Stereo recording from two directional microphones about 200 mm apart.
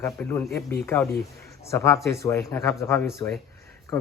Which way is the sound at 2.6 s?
15° left (ahead or behind).